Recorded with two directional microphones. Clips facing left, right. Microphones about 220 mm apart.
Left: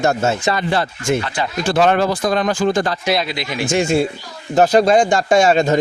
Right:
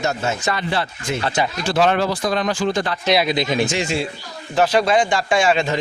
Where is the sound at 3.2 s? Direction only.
20° right (ahead or behind).